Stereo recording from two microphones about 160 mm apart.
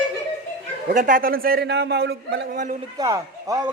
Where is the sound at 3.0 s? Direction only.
20° right (ahead or behind).